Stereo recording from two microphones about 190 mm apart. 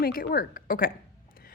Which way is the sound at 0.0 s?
50° left (ahead or behind).